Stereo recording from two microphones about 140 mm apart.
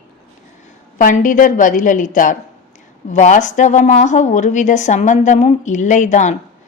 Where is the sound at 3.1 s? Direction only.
60° left (ahead or behind).